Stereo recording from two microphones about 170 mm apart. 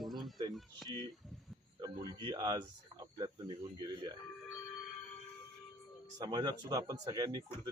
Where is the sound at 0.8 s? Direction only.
25° right (ahead or behind).